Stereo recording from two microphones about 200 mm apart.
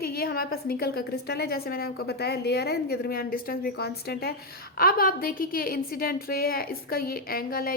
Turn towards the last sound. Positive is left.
turn(degrees=50)  # may be behind; listen again after turning